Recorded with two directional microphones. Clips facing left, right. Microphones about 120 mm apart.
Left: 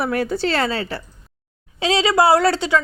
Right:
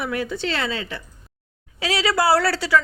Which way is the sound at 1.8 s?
25° left (ahead or behind).